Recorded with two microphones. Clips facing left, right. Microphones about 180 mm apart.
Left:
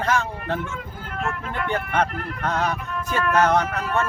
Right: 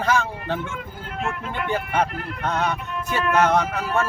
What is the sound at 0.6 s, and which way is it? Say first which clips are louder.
Speech: even; 25° right (ahead or behind).